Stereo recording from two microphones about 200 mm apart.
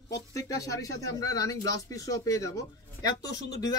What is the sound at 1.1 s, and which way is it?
Speech, 15° left (ahead or behind).